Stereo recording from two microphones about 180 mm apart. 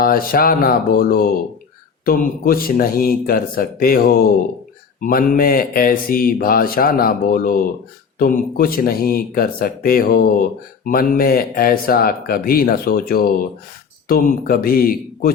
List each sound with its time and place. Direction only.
0.0 s speech: 55° left (ahead or behind)